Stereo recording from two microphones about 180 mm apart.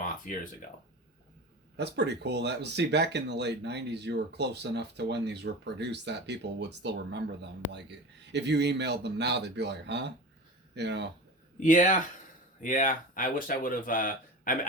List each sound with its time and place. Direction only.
0.3 s speech: 45° left (ahead or behind)
1.7 s speech: 70° right (ahead or behind)
11.6 s speech: 45° left (ahead or behind)